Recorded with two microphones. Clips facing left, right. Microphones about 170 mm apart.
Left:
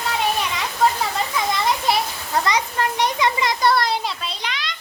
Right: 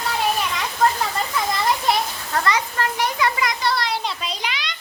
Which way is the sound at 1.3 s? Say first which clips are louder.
Even; centre (ahead or behind).